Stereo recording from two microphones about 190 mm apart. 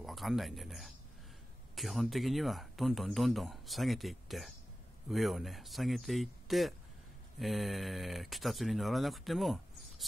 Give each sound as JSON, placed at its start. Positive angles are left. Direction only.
{"t": 0.0, "sound": "speech", "side_deg": 0}